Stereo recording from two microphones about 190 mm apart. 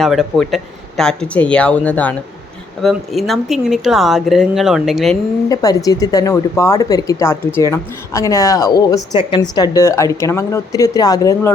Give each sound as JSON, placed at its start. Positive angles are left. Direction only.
{"t": 0.0, "sound": "speech", "side_deg": 0}
{"t": 5.5, "sound": "speech", "side_deg": 20}